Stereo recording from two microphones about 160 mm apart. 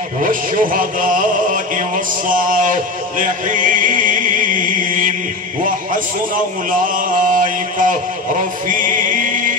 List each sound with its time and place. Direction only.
0.2 s a man's voice: 60° right (ahead or behind)
2.2 s chant: 55° right (ahead or behind)
6.3 s mantra: 55° right (ahead or behind)